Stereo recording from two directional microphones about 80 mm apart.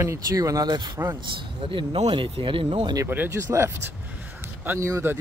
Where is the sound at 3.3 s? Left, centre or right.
Right.